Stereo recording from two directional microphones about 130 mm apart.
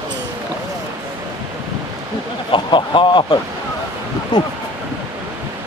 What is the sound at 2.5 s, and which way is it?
Speech, 40° left (ahead or behind).